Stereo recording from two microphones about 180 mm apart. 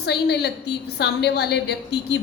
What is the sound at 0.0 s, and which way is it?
A woman's voice, 70° left (ahead or behind).